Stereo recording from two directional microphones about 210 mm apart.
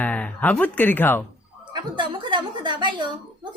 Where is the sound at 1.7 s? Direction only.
20° right (ahead or behind).